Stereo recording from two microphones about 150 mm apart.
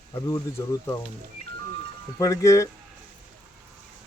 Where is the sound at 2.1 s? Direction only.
20° left (ahead or behind).